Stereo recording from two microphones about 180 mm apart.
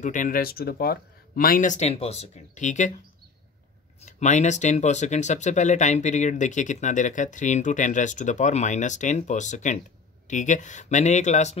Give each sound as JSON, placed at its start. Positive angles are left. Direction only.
{"t": 0.0, "sound": "speech", "side_deg": 45}
{"t": 4.0, "sound": "speech", "side_deg": 40}